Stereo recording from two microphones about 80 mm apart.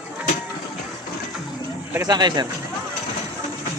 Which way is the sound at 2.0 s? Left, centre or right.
Right.